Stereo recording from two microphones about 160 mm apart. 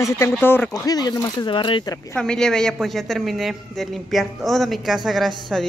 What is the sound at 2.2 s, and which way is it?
Speech, 5° left (ahead or behind).